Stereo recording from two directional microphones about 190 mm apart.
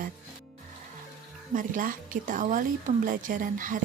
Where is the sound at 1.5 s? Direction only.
45° right (ahead or behind).